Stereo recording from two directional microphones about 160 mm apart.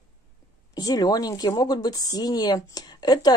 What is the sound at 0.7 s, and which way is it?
A woman's voice, 25° left (ahead or behind).